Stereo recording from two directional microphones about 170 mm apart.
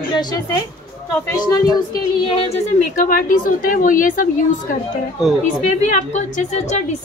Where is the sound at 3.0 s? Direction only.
55° left (ahead or behind).